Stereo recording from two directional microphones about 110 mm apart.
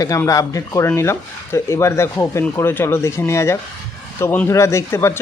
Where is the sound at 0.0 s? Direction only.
30° left (ahead or behind).